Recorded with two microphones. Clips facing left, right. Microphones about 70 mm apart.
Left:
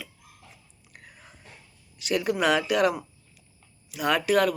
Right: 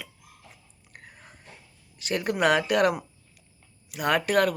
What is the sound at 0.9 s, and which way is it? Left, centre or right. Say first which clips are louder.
Whispering: right 1 dB; right.